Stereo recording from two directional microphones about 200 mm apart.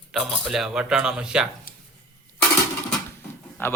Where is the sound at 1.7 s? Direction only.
45° left (ahead or behind).